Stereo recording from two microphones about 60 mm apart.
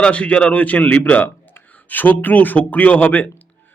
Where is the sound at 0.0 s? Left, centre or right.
Centre.